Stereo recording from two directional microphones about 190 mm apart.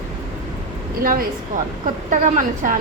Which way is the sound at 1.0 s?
50° right (ahead or behind).